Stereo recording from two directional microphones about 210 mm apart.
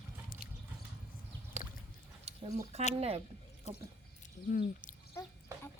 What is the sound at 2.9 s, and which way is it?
Speech, 30° right (ahead or behind).